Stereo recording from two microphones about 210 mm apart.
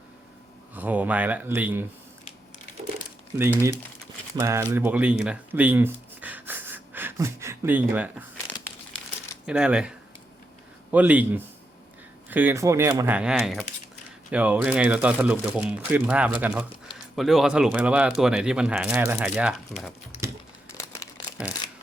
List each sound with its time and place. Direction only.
0.7 s speech: 10° right (ahead or behind)
3.3 s speech: 10° right (ahead or behind)
9.5 s speech: 5° right (ahead or behind)
10.9 s speech: 5° right (ahead or behind)
20.7 s crumpling: 15° left (ahead or behind)